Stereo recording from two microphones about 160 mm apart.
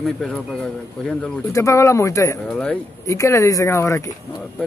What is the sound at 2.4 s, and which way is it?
Speech, 5° left (ahead or behind).